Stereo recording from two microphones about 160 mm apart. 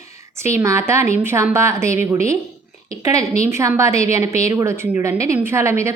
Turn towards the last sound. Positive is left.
turn(degrees=-15)  # may be behind; listen again after turning